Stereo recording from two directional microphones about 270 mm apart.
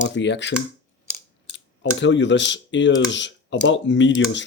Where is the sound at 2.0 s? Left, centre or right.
Left.